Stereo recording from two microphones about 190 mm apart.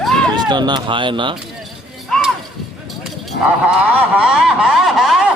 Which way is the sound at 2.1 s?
Centre (ahead or behind).